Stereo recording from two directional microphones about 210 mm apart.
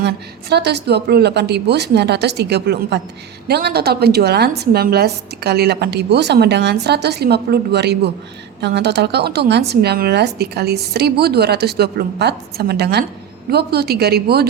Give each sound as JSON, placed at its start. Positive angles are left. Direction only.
{"t": 0.5, "sound": "a woman's voice", "side_deg": -50}